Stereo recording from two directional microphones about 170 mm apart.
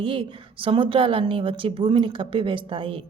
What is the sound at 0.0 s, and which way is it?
A woman's voice, 30° right (ahead or behind).